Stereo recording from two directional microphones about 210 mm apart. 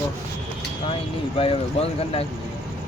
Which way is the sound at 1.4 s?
25° left (ahead or behind).